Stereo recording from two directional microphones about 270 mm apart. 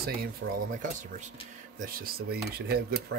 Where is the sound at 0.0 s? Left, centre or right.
Right.